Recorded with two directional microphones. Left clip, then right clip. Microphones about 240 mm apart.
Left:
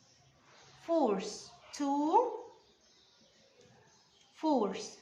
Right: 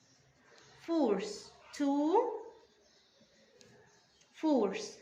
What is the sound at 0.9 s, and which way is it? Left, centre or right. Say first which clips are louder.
A woman's voice: left 1 dB; left.